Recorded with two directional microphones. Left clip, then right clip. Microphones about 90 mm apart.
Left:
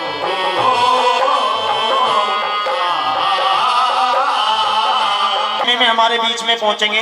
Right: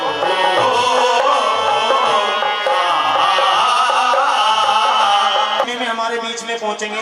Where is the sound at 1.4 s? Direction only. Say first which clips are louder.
Right 1 dB; 35° right (ahead or behind).